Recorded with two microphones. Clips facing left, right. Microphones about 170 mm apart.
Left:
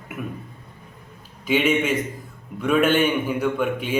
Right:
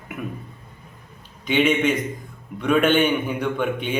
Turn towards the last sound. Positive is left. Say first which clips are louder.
# left 1 dB
turn(degrees=5)  # may be behind; listen again after turning